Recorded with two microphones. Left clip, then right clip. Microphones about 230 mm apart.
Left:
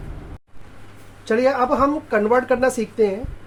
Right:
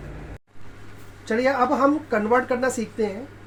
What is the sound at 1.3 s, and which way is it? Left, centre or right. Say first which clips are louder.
Speech: left 3 dB; left.